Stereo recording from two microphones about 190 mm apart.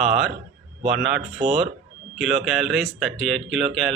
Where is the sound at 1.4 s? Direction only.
30° right (ahead or behind).